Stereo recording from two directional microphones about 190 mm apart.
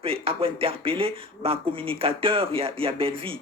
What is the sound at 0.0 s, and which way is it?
Speech, 30° right (ahead or behind).